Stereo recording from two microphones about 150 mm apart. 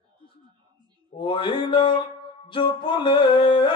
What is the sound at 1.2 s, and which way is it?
Music, 35° left (ahead or behind).